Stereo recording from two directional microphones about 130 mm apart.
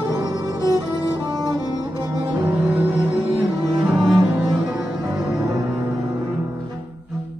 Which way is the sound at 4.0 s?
Centre (ahead or behind).